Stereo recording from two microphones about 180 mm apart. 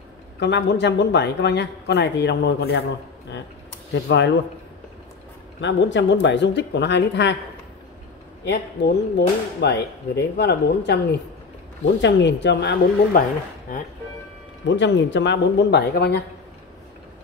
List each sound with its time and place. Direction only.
0.4 s speech: 75° left (ahead or behind)
3.9 s speech: 75° left (ahead or behind)
5.6 s speech: 90° left; by 7.3 s 75° left (ahead or behind)
8.5 s speech: 70° left (ahead or behind)
11.8 s speech: 80° left
14.7 s speech: 85° left; by 16.2 s 65° left (ahead or behind)